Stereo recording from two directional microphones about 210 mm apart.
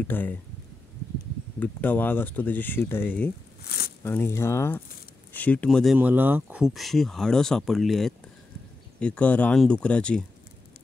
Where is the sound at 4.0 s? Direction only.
10° left (ahead or behind).